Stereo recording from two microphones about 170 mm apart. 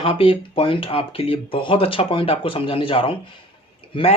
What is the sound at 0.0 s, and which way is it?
Speech, 30° left (ahead or behind).